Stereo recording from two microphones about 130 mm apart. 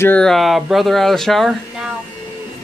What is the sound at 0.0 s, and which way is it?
Speech, 15° left (ahead or behind).